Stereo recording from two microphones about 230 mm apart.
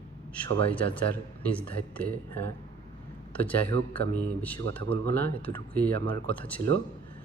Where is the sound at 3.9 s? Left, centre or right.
Centre.